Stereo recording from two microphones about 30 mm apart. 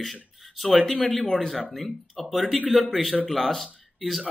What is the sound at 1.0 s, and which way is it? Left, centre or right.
Speech, left.